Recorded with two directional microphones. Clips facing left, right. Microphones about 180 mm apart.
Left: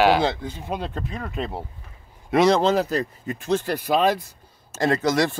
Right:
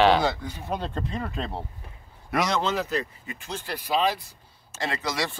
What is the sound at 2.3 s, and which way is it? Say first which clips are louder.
Speech: left 8 dB; 30° left (ahead or behind).